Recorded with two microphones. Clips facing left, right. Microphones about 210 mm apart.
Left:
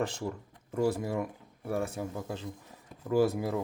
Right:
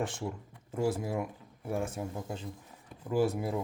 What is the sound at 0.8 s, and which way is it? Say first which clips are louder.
Speech: left 2 dB; 40° left (ahead or behind).